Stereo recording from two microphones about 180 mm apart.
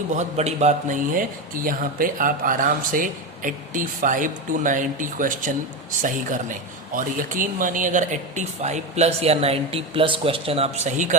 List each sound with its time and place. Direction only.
0.2 s speech: 40° right (ahead or behind)